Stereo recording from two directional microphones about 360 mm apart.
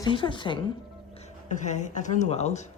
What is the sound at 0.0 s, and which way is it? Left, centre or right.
A woman's voice, centre.